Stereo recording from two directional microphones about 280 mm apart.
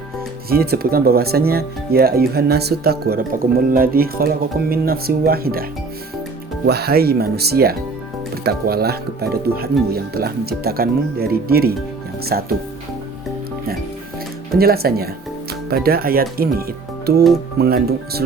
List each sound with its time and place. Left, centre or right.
0.5 s speech: right
6.7 s speech: right
14.5 s speech: right